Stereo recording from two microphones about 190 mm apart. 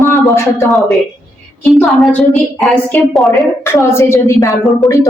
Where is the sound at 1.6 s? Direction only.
Centre (ahead or behind).